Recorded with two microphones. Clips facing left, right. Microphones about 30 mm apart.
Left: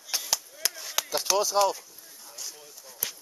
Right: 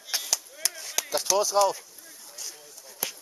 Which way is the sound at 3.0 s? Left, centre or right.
Right.